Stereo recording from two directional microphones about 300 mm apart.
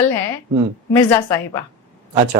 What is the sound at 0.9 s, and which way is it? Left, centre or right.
Speech, centre.